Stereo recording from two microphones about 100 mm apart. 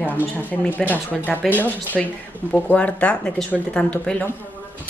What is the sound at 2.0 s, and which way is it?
Speech, 5° right (ahead or behind).